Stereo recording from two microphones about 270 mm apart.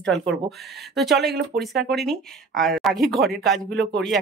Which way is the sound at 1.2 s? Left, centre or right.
Right.